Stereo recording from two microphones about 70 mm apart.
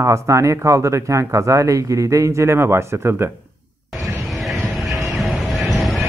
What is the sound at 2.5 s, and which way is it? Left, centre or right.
Speech, right.